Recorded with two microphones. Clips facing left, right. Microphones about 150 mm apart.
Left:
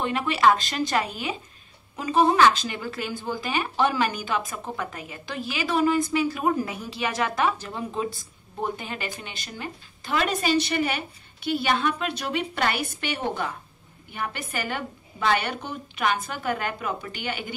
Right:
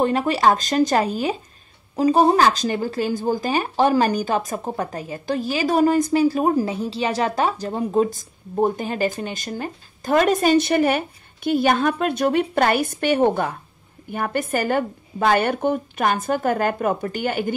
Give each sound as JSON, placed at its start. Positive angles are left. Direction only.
{"t": 0.0, "sound": "speech", "side_deg": -40}